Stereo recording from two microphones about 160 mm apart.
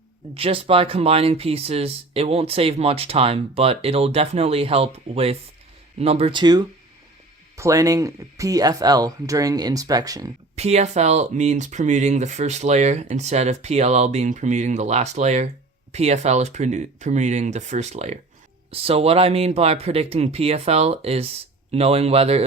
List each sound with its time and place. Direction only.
0.3 s speech: 35° right (ahead or behind)
10.5 s speech: 40° right (ahead or behind)